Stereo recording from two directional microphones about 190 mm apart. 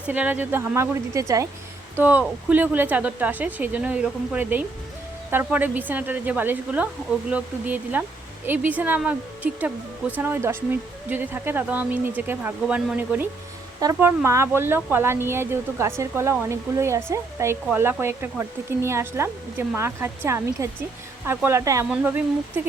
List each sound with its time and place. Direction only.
0.1 s speech: 10° right (ahead or behind)
13.7 s speech: 20° right (ahead or behind)